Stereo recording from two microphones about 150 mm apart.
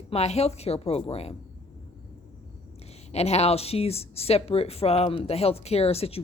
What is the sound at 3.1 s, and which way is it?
A woman's voice, 45° left (ahead or behind).